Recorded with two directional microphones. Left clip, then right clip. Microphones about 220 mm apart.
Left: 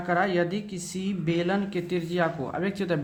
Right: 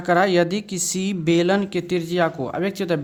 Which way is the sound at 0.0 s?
40° right (ahead or behind).